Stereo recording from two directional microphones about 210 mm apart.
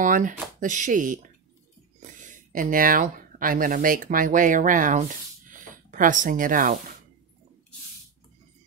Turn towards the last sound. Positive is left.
turn(degrees=-40)  # may be behind; listen again after turning